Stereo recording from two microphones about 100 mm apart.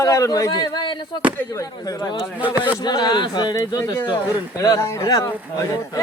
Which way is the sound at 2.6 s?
45° left (ahead or behind).